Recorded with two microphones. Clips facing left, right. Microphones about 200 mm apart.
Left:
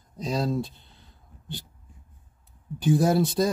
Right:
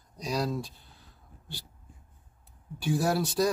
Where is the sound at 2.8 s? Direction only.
20° left (ahead or behind).